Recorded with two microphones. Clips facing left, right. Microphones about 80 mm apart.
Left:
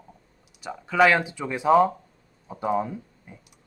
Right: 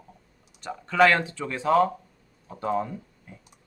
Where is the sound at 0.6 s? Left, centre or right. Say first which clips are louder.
Even; centre.